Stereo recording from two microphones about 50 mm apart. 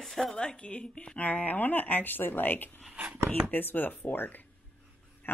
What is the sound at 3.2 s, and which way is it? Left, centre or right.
Speech, right.